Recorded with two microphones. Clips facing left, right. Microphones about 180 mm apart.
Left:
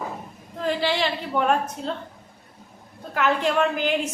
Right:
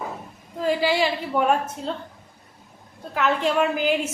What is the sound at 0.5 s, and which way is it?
A woman's voice, 5° right (ahead or behind).